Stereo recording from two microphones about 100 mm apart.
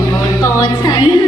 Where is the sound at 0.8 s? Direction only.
45° left (ahead or behind).